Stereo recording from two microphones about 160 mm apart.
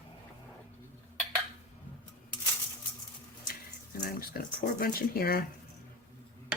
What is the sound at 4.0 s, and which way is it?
Speech, 70° left (ahead or behind).